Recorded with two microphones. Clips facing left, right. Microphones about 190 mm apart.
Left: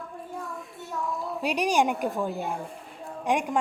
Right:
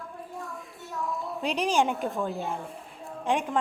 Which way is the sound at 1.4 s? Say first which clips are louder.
Left 1 dB; 15° left (ahead or behind).